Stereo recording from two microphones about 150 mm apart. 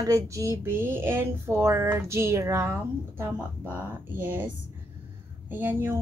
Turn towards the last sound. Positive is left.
turn(degrees=-15)  # may be behind; listen again after turning